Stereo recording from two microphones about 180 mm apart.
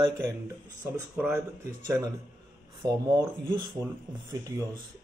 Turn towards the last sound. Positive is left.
turn(degrees=-20)  # may be behind; listen again after turning